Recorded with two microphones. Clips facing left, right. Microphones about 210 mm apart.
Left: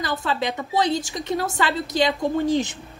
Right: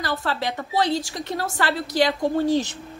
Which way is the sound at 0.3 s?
15° left (ahead or behind).